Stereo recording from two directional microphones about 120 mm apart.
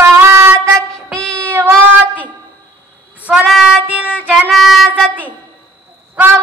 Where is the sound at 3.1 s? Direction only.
10° right (ahead or behind).